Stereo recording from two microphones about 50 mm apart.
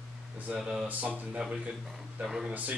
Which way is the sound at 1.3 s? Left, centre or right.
Centre.